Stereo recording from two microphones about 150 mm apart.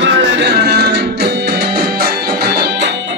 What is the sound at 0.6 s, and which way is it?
Music, 90° right.